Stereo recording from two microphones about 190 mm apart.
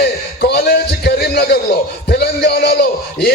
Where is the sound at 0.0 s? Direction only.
60° left (ahead or behind).